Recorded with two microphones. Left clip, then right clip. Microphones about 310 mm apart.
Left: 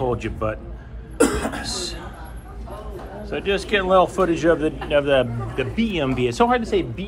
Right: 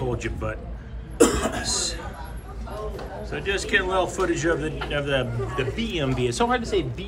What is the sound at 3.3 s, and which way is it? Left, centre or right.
Speech, centre.